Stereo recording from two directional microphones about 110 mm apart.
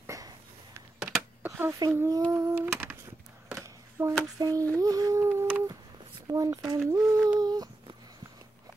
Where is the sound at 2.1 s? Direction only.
30° right (ahead or behind).